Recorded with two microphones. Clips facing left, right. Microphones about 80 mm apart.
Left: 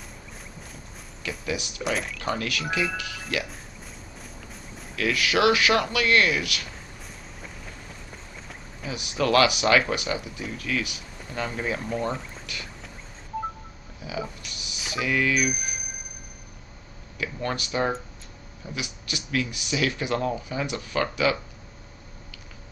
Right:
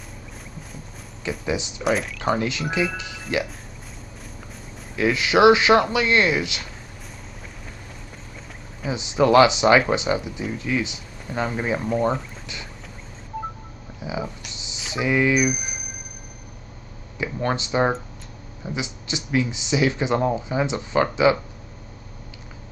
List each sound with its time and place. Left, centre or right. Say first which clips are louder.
1.4 s speech: right 4 dB; right
1.8 s speech: right 5 dB; centre
2.3 s speech: right 3 dB; right
4.9 s speech: right 5 dB; right
8.8 s speech: right 7 dB; right
14.0 s a sound: right 3 dB; right
14.9 s speech: right 4 dB; right
15.3 s a sound: right 4 dB; centre
17.2 s speech: right 5 dB; right